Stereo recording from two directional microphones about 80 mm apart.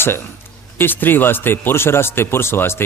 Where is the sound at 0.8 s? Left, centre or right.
Left.